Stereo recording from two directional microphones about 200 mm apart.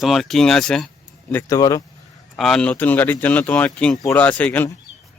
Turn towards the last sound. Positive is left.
turn(degrees=10)  # may be behind; listen again after turning